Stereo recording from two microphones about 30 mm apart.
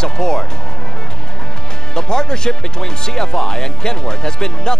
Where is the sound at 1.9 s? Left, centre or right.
Left.